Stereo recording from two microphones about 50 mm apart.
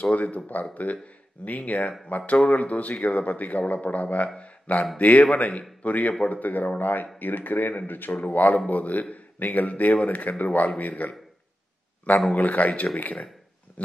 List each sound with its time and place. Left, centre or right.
0.0 s a man's voice: left
1.4 s a man's voice: left
12.4 s speech: left
13.8 s a sound: left